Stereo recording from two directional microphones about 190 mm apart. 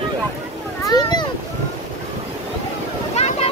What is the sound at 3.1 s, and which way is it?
Boat, 35° left (ahead or behind).